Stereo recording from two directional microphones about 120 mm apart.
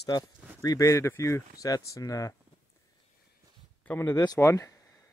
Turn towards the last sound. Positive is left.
turn(degrees=25)  # may be behind; listen again after turning